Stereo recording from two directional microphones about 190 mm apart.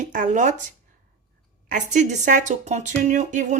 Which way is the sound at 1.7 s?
40° right (ahead or behind).